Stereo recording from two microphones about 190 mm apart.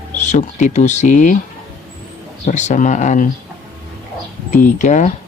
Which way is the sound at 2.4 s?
40° left (ahead or behind).